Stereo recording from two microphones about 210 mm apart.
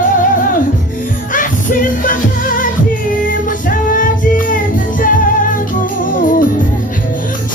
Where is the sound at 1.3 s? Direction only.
40° left (ahead or behind).